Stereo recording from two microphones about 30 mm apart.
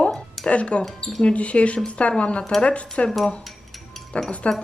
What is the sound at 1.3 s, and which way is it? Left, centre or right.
Speech, left.